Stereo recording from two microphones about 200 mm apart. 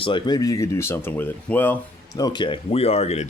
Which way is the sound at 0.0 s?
20° left (ahead or behind).